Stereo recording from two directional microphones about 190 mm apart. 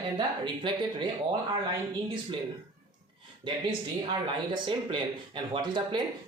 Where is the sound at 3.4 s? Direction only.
25° right (ahead or behind).